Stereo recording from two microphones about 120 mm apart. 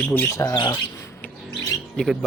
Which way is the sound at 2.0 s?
5° left (ahead or behind).